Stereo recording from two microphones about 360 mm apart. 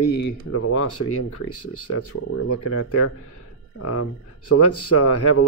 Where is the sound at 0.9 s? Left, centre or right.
Left.